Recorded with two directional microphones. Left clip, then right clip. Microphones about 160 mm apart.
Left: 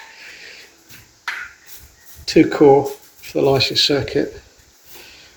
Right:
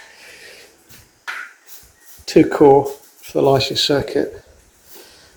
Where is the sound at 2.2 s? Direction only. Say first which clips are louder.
Right 1 dB; 15° right (ahead or behind).